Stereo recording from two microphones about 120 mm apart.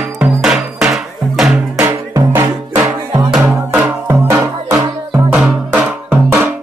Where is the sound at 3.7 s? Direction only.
15° right (ahead or behind).